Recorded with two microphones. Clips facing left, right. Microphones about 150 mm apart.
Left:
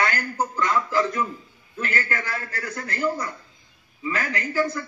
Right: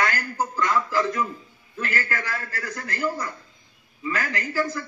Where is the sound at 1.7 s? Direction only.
25° left (ahead or behind).